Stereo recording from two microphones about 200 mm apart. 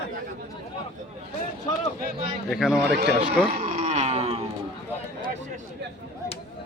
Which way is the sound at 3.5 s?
30° right (ahead or behind).